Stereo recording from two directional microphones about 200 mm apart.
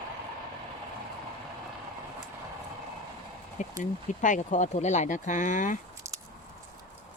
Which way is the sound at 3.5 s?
40° left (ahead or behind).